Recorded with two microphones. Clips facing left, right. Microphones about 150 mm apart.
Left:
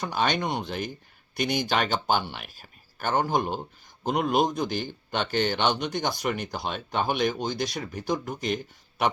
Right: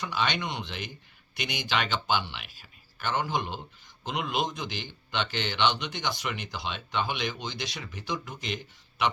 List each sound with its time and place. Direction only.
0.0 s speech: 45° left (ahead or behind)